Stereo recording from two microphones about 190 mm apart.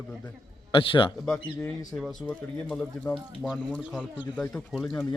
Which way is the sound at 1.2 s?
5° left (ahead or behind).